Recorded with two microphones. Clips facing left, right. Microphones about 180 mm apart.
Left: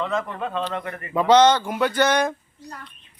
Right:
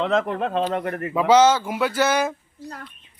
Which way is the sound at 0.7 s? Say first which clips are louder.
Right 5 dB; 45° right (ahead or behind).